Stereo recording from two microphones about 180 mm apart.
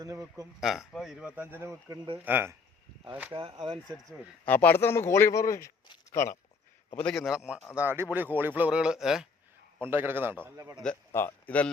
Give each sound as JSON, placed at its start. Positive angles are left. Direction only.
{"t": 0.0, "sound": "a man's voice", "side_deg": -20}
{"t": 0.6, "sound": "a man's voice", "side_deg": 0}
{"t": 3.3, "sound": "a man's voice", "side_deg": -30}
{"t": 3.6, "sound": "a man's voice", "side_deg": 0}
{"t": 6.9, "sound": "a man's voice", "side_deg": 5}
{"t": 10.8, "sound": "a man's voice", "side_deg": 15}